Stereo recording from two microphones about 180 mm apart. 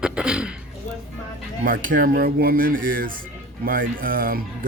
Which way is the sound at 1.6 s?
50° right (ahead or behind).